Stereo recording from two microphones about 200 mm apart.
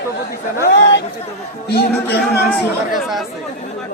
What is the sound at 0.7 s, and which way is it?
A man's voice, 60° left (ahead or behind).